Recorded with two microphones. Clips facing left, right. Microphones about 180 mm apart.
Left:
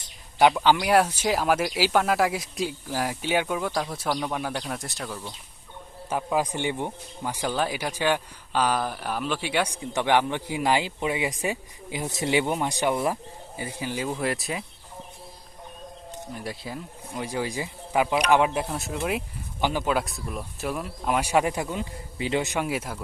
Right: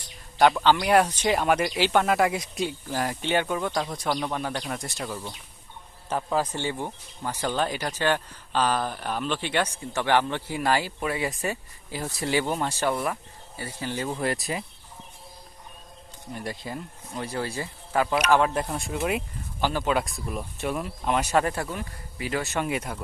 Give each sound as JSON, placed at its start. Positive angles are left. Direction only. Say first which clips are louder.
{"t": 0.3, "sound": "speech", "louder": "even", "side_deg": 10}
{"t": 6.1, "sound": "speech", "louder": "left 1 dB", "side_deg": 10}
{"t": 16.3, "sound": "speech", "louder": "right 2 dB", "side_deg": 0}
{"t": 17.2, "sound": "speech", "louder": "left 1 dB", "side_deg": 10}
{"t": 18.5, "sound": "speech", "louder": "even", "side_deg": 5}
{"t": 19.6, "sound": "speech", "louder": "left 1 dB", "side_deg": 15}
{"t": 19.9, "sound": "speech", "louder": "even", "side_deg": 0}
{"t": 22.6, "sound": "speech", "louder": "even", "side_deg": 5}